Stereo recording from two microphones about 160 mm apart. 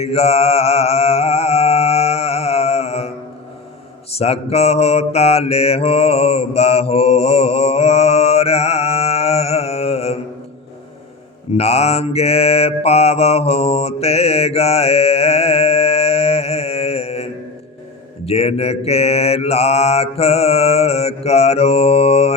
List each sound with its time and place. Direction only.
0.0 s mantra: 40° left (ahead or behind)
4.1 s mantra: 40° left (ahead or behind)
11.5 s mantra: 40° left (ahead or behind)
18.3 s mantra: 40° left (ahead or behind)